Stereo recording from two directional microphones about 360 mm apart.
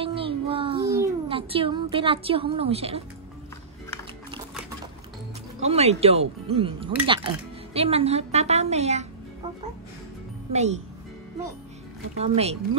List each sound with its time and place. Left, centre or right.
0.0 s child singing: centre
5.6 s speech: centre
10.5 s speech: centre
12.2 s speech: centre